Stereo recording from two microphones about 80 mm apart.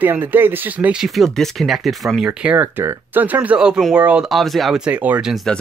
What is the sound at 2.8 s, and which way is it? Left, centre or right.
Speech, right.